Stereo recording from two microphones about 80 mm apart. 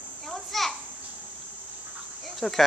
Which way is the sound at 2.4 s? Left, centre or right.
Centre.